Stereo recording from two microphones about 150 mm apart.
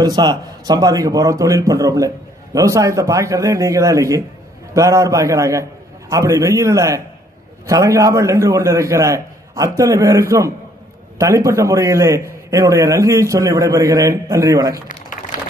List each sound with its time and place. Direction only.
0.0 s a man's voice: 25° right (ahead or behind)